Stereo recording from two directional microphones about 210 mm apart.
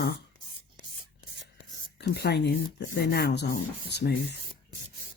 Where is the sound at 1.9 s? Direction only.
50° left (ahead or behind).